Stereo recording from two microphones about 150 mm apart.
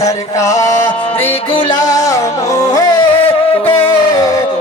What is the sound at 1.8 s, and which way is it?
Music, 20° left (ahead or behind).